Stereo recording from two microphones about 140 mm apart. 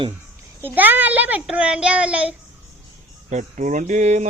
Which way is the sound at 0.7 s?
15° right (ahead or behind).